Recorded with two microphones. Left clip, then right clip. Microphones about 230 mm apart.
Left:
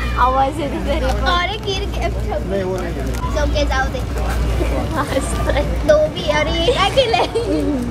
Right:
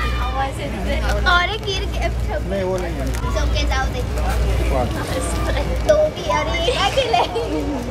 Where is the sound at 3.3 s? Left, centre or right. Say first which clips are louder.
Left 5 dB; centre.